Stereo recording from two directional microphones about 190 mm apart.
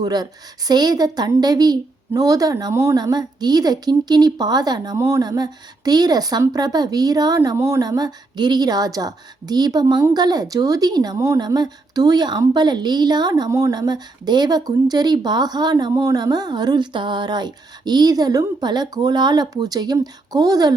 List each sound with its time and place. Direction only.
0.0 s a woman's voice: 20° right (ahead or behind)